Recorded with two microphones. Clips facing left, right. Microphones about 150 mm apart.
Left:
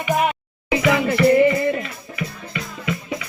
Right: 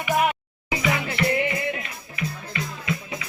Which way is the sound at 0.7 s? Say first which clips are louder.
Left 8 dB; 60° left (ahead or behind).